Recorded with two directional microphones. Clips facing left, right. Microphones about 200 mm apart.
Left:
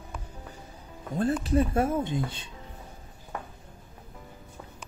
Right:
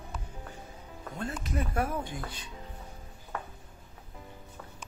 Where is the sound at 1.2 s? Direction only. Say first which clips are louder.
Left 10 dB; 35° left (ahead or behind).